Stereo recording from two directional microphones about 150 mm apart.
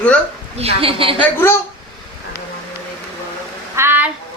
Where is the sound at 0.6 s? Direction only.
40° right (ahead or behind).